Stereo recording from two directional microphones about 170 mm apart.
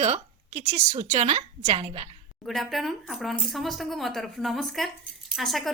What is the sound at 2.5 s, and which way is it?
A woman's voice, centre (ahead or behind).